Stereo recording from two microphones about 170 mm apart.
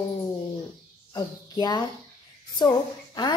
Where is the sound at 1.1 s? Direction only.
25° left (ahead or behind).